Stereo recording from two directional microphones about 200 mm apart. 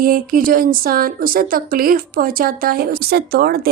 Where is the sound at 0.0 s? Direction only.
45° right (ahead or behind).